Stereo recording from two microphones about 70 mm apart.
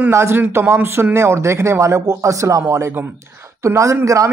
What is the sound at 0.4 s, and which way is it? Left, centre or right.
Speech, right.